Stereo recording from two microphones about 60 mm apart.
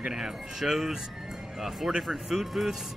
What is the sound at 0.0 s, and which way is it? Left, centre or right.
Speech, centre.